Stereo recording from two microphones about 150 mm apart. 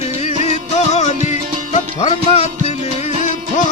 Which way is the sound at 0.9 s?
50° left (ahead or behind).